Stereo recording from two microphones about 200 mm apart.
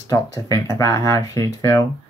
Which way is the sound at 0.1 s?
15° left (ahead or behind).